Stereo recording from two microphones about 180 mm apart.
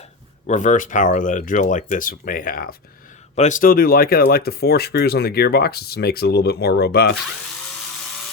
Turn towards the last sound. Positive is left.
turn(degrees=60)  # may be behind; listen again after turning